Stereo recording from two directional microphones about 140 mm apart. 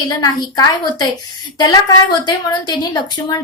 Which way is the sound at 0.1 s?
30° left (ahead or behind).